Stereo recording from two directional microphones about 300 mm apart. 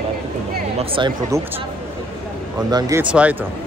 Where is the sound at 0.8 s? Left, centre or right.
Centre.